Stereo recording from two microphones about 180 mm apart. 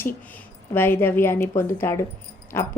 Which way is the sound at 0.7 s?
10° left (ahead or behind).